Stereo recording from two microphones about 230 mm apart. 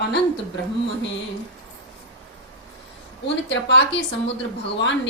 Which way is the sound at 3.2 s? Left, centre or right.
Left.